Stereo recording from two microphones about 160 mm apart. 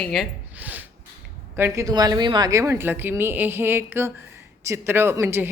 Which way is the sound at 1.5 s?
15° right (ahead or behind).